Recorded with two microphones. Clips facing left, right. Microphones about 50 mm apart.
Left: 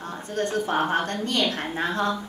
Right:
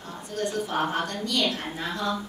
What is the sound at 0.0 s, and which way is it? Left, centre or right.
Speech, left.